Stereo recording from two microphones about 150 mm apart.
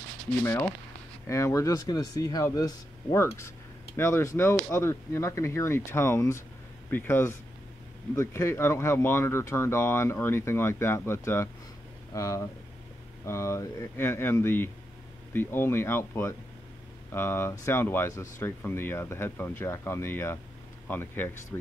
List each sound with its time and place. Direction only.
0.4 s speech: 15° left (ahead or behind)